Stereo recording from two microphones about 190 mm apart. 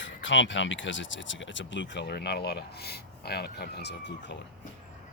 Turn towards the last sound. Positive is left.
turn(degrees=60)  # may be behind; listen again after turning